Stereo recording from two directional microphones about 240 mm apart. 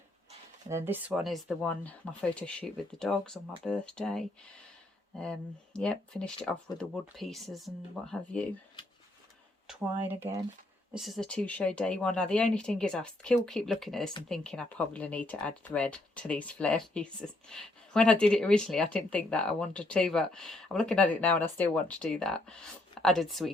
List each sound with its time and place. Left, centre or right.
0.7 s speech: centre
9.6 s speech: centre